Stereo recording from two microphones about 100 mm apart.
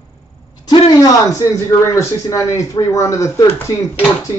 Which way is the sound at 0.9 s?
35° left (ahead or behind).